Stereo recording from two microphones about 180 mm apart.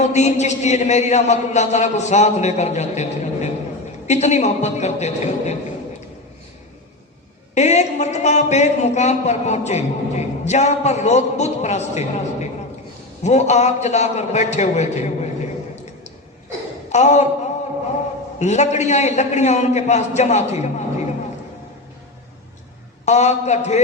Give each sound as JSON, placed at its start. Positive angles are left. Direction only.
{"t": 0.0, "sound": "a man's voice", "side_deg": 40}
{"t": 7.5, "sound": "a man's voice", "side_deg": 40}
{"t": 16.9, "sound": "a man's voice", "side_deg": 40}
{"t": 18.3, "sound": "a man's voice", "side_deg": 40}
{"t": 23.0, "sound": "a man's voice", "side_deg": 40}